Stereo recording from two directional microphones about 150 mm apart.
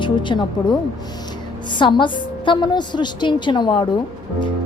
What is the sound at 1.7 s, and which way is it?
A woman's voice, 30° left (ahead or behind).